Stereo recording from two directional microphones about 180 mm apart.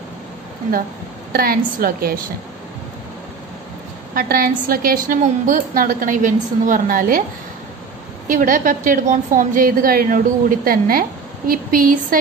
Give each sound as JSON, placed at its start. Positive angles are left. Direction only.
{"t": 1.3, "sound": "a woman's voice", "side_deg": -55}
{"t": 4.1, "sound": "a woman's voice", "side_deg": -55}
{"t": 8.3, "sound": "a woman's voice", "side_deg": -50}